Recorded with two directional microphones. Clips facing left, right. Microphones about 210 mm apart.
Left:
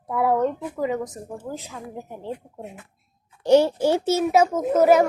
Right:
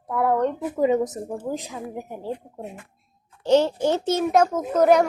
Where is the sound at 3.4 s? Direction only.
10° left (ahead or behind).